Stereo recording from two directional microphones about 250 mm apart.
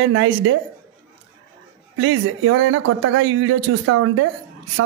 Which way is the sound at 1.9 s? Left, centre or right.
Right.